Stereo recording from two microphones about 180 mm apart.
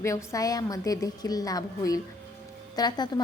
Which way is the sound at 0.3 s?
20° left (ahead or behind).